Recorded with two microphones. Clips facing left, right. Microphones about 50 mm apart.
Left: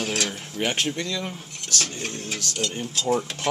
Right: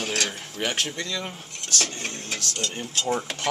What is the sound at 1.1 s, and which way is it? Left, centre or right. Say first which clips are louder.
Speech: left 1 dB; centre.